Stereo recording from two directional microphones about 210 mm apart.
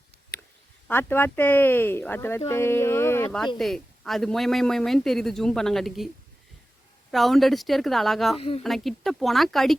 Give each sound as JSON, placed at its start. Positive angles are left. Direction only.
{"t": 0.9, "sound": "speech", "side_deg": 10}
{"t": 7.1, "sound": "speech", "side_deg": 0}